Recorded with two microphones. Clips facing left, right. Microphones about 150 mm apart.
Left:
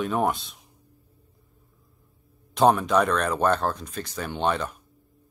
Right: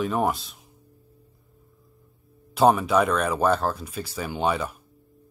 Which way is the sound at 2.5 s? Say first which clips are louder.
Right 1 dB; 5° right (ahead or behind).